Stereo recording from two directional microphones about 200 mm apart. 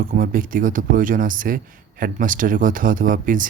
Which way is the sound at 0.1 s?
45° right (ahead or behind).